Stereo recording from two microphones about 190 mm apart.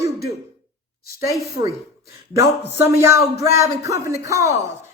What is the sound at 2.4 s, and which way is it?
Speech, 15° right (ahead or behind).